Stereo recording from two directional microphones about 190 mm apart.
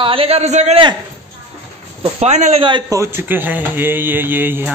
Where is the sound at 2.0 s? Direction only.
35° right (ahead or behind).